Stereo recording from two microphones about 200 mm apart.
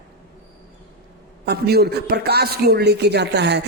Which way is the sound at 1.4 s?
55° right (ahead or behind).